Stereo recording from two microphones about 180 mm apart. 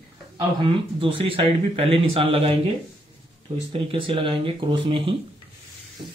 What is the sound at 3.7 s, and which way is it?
Speech, 30° right (ahead or behind).